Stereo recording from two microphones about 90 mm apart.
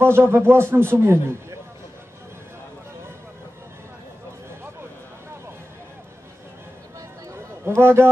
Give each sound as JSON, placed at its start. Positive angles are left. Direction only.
{"t": 0.0, "sound": "a man's voice", "side_deg": -25}
{"t": 7.6, "sound": "a man's voice", "side_deg": -30}